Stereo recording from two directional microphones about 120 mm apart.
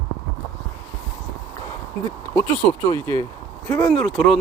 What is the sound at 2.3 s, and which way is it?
Speech, 10° left (ahead or behind).